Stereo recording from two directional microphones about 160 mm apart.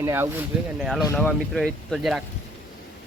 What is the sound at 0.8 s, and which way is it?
Speech, centre (ahead or behind).